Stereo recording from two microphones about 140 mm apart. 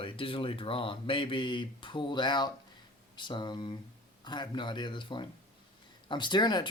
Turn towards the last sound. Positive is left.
turn(degrees=30)  # may be behind; listen again after turning